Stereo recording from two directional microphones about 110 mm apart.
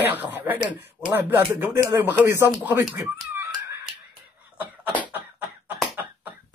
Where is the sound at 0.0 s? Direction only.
15° right (ahead or behind).